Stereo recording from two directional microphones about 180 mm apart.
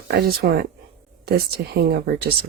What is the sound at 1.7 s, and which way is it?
Speech, 60° right (ahead or behind).